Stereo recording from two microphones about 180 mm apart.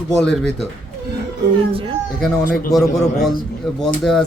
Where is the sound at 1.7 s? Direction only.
30° right (ahead or behind).